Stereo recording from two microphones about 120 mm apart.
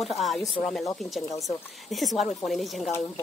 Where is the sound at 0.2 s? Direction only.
Centre (ahead or behind).